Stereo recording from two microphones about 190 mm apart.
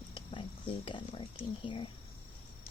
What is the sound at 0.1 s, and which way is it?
Speech, 25° left (ahead or behind).